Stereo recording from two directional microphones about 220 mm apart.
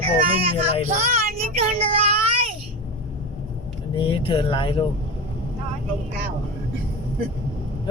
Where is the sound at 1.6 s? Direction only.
25° right (ahead or behind).